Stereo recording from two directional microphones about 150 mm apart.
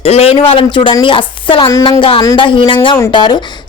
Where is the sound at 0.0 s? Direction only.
40° left (ahead or behind).